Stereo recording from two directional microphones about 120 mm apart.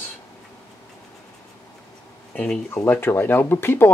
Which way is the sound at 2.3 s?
10° left (ahead or behind).